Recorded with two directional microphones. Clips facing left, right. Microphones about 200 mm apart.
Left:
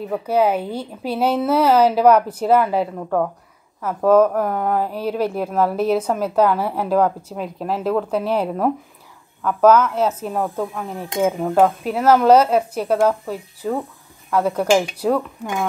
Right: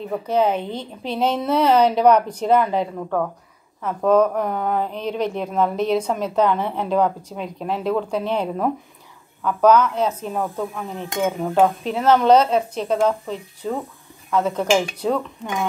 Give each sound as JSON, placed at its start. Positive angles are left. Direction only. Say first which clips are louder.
{"t": 0.3, "sound": "a woman's voice", "louder": "left 2 dB", "side_deg": 10}